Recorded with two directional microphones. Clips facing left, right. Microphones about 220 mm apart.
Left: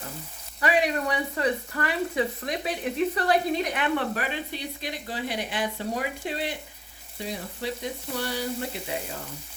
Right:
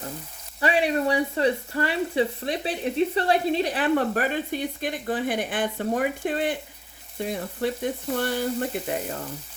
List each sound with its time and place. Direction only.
0.6 s speech: 30° right (ahead or behind); by 9.0 s 50° right (ahead or behind)